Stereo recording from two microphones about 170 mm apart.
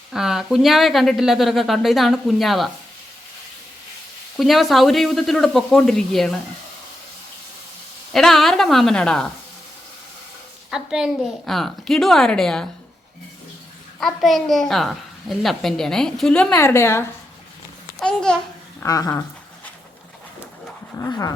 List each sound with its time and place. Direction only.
0.1 s a woman's voice: centre (ahead or behind)
4.4 s a woman's voice: centre (ahead or behind)
8.1 s a woman's voice: centre (ahead or behind)
10.7 s a woman's voice: 5° right (ahead or behind)
14.0 s a woman's voice: centre (ahead or behind)
18.0 s a woman's voice: 5° left (ahead or behind)
18.8 s speech: 20° left (ahead or behind)
21.0 s speech: 20° left (ahead or behind)